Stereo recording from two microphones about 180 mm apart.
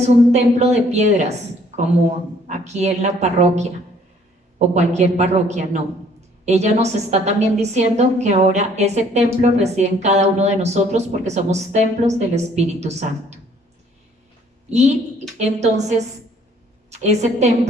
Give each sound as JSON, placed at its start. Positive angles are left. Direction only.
{"t": 0.3, "sound": "a woman's voice", "side_deg": -40}
{"t": 2.5, "sound": "a woman's voice", "side_deg": -40}
{"t": 4.7, "sound": "a woman's voice", "side_deg": -40}
{"t": 14.7, "sound": "a woman's voice", "side_deg": -40}